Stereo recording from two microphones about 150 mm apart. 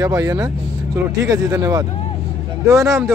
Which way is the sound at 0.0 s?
20° right (ahead or behind).